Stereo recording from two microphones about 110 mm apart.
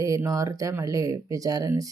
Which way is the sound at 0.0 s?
30° right (ahead or behind).